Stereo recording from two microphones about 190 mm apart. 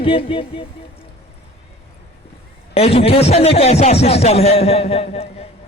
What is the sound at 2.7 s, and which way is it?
A man's voice, 30° left (ahead or behind).